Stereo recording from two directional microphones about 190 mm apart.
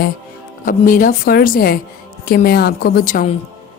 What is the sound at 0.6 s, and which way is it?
Speech, 45° left (ahead or behind).